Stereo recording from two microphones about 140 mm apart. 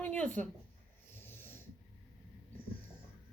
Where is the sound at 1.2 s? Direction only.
15° left (ahead or behind).